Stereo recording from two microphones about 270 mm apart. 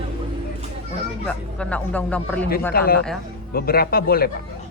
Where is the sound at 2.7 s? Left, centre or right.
Left.